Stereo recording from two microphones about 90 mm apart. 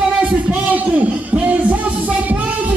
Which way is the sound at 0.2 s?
15° right (ahead or behind).